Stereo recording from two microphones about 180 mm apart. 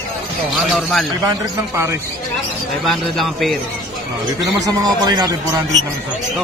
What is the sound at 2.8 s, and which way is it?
Speech, centre (ahead or behind).